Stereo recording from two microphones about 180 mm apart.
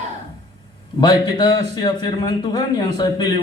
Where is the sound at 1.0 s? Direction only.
25° left (ahead or behind).